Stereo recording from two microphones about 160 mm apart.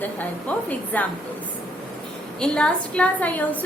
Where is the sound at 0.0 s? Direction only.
10° left (ahead or behind).